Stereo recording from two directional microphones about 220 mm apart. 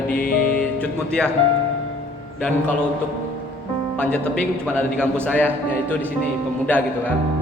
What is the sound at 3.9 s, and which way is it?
A man's voice, 5° left (ahead or behind).